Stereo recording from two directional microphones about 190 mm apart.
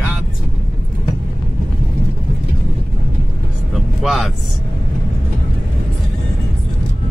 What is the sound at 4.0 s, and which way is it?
Speech, centre (ahead or behind).